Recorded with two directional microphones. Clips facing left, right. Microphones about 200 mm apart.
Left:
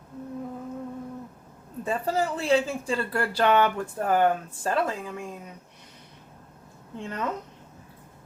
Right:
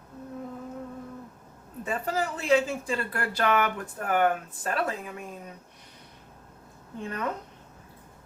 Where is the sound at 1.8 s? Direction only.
30° left (ahead or behind).